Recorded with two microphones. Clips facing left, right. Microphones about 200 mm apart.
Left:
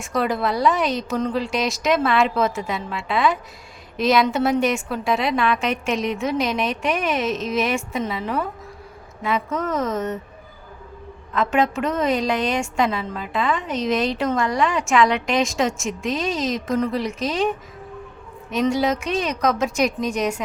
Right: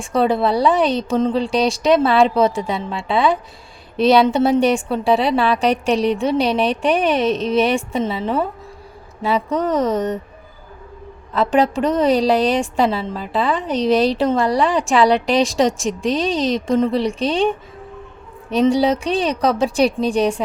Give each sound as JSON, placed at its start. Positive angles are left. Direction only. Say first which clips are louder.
{"t": 0.0, "sound": "a woman's voice", "louder": "right 5 dB", "side_deg": -30}
{"t": 11.3, "sound": "a woman's voice", "louder": "right 4 dB", "side_deg": -35}
{"t": 18.5, "sound": "a woman's voice", "louder": "right 5 dB", "side_deg": -30}